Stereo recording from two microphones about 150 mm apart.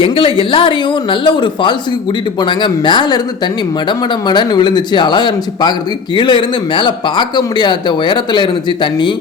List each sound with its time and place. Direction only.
0.0 s speech: 35° left (ahead or behind)